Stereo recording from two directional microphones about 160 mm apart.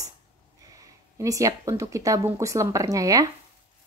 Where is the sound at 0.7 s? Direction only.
20° right (ahead or behind).